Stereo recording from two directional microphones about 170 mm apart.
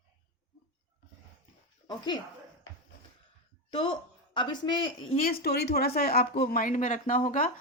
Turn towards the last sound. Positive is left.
turn(degrees=55)  # may be behind; listen again after turning